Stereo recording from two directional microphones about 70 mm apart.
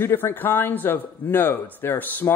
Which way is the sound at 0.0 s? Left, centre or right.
Left.